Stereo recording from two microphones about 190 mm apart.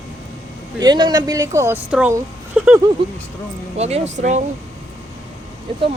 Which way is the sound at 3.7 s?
35° right (ahead or behind).